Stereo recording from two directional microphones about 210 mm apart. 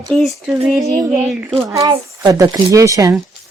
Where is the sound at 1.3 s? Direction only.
5° right (ahead or behind).